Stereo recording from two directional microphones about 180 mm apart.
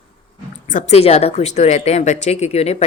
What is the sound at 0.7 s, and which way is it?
A woman's voice, 40° left (ahead or behind).